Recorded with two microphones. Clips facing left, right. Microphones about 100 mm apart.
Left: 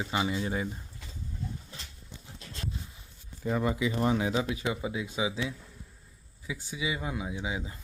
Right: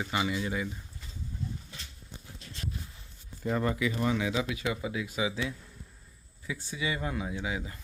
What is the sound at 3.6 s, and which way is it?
Speech, 20° left (ahead or behind).